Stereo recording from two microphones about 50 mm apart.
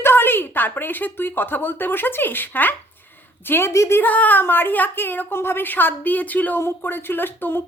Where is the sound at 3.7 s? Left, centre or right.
Left.